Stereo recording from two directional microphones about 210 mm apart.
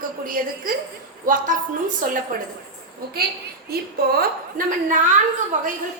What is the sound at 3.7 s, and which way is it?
A woman's voice, 45° right (ahead or behind).